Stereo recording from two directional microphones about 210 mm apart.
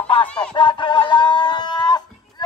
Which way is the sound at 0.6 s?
20° left (ahead or behind).